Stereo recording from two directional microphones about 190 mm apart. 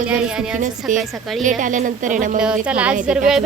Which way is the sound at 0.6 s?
45° right (ahead or behind).